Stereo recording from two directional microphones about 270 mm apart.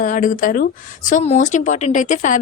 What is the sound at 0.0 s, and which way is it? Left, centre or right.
A woman's voice, left.